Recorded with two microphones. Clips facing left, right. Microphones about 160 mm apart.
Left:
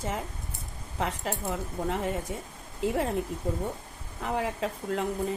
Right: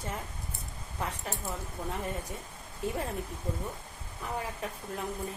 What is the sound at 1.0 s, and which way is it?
A woman's voice, 90° left.